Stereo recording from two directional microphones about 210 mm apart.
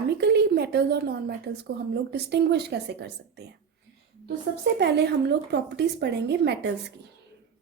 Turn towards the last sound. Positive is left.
turn(degrees=-55)  # may be behind; listen again after turning